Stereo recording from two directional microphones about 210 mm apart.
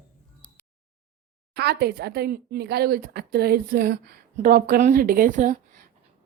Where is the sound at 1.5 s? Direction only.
50° right (ahead or behind).